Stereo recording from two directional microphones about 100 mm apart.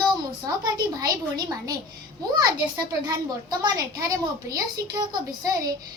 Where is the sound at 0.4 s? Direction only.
40° right (ahead or behind).